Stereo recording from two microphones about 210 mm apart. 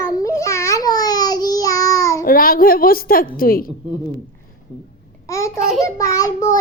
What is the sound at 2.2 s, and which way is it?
A woman's voice, 45° left (ahead or behind).